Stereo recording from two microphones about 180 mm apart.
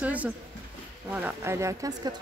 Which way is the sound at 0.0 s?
10° right (ahead or behind).